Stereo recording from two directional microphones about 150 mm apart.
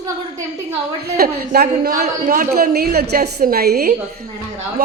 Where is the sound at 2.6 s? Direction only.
90° right.